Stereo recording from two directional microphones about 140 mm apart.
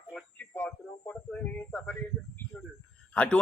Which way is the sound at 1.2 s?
10° left (ahead or behind).